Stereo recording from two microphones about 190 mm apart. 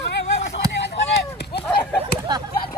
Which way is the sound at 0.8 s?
60° left (ahead or behind).